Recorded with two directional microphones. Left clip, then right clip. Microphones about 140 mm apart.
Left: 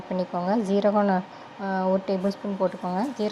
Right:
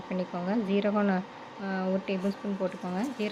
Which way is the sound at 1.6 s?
30° left (ahead or behind).